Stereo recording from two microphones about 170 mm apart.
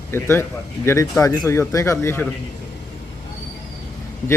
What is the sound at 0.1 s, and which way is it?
Speech, 15° left (ahead or behind).